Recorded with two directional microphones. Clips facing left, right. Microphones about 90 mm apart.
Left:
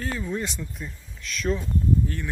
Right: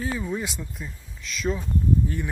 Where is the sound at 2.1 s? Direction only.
15° right (ahead or behind).